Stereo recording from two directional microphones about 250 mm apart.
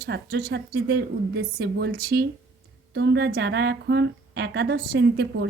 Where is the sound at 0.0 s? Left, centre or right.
Right.